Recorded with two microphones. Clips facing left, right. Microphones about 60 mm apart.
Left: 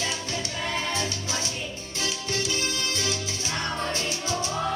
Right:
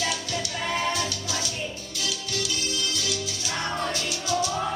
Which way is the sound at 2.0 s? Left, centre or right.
Left.